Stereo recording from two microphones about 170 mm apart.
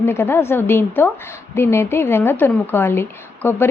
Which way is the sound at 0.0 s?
15° left (ahead or behind).